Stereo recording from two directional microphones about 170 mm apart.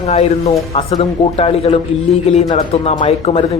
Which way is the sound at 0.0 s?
40° left (ahead or behind).